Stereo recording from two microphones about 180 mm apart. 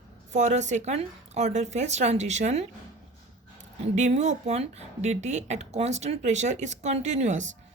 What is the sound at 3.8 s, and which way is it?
Speech, 40° right (ahead or behind).